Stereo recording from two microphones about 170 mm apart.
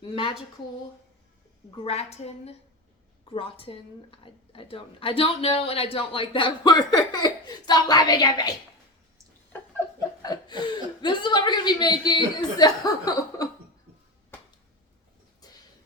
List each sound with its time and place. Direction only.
0.0 s a woman's voice: 30° left (ahead or behind)
1.7 s a woman's voice: 35° left (ahead or behind)
10.2 s a woman's voice: 25° left (ahead or behind)